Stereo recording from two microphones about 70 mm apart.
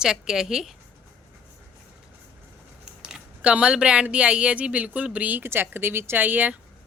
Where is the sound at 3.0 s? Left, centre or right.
Centre.